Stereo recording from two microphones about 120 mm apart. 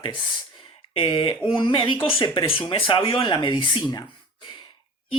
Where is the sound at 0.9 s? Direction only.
45° left (ahead or behind).